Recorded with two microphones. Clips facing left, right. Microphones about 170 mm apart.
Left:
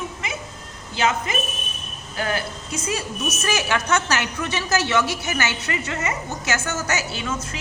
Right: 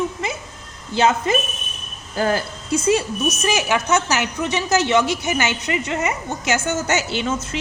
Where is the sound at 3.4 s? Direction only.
10° right (ahead or behind).